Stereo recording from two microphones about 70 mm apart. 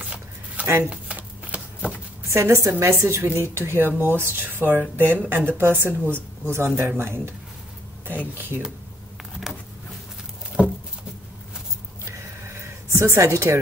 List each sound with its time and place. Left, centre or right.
0.0 s shuffling cards: centre
2.2 s speech: right
8.2 s speech: right
12.9 s a woman's voice: right